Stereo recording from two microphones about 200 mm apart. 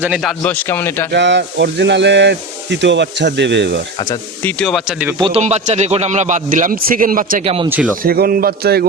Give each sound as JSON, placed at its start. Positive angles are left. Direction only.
{"t": 0.0, "sound": "a man's voice", "side_deg": 0}
{"t": 1.1, "sound": "speech", "side_deg": -60}
{"t": 4.4, "sound": "speech", "side_deg": 0}
{"t": 5.2, "sound": "a man's voice", "side_deg": -30}
{"t": 7.4, "sound": "speech", "side_deg": -30}
{"t": 8.0, "sound": "a sound", "side_deg": -50}